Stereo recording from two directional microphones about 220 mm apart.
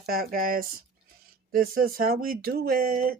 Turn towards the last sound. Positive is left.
turn(degrees=-40)  # may be behind; listen again after turning